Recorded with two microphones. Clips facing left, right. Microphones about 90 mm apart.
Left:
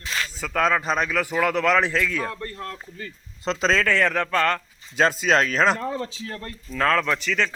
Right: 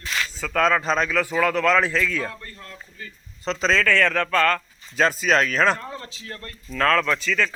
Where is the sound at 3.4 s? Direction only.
30° left (ahead or behind).